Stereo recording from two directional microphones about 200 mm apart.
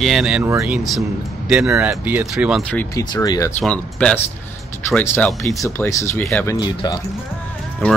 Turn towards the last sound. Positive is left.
turn(degrees=10)  # may be behind; listen again after turning